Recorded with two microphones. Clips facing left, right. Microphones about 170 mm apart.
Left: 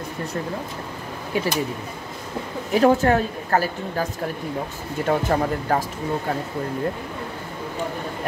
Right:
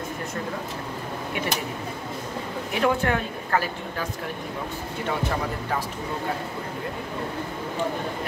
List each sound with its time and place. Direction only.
2.7 s a woman's voice: 40° left (ahead or behind)